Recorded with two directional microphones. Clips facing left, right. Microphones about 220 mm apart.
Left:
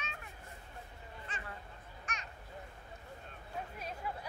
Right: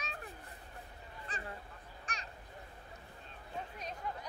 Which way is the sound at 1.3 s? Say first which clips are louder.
Right 3 dB; 35° right (ahead or behind).